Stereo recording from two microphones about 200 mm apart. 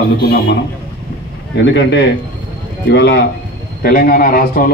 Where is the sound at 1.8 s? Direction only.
65° left (ahead or behind).